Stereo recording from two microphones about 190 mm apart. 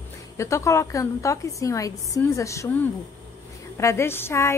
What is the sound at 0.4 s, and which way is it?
Speech, 15° left (ahead or behind).